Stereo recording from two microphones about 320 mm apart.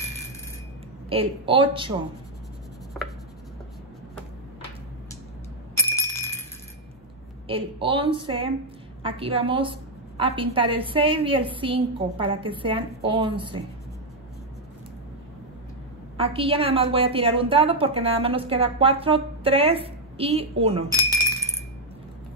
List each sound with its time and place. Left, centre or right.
1.0 s a woman's voice: centre
5.8 s glass: centre
7.4 s a woman's voice: centre
16.2 s a woman's voice: centre
20.9 s a sound: centre